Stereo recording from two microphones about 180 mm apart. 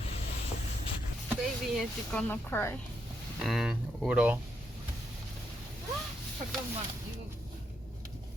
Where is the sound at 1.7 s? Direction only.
5° left (ahead or behind).